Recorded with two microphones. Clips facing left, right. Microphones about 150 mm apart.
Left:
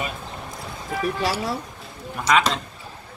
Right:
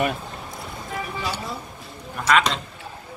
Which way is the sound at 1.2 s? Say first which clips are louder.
Left 5 dB; 90° left.